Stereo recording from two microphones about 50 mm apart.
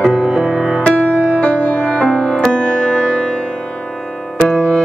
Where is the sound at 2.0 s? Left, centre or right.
Centre.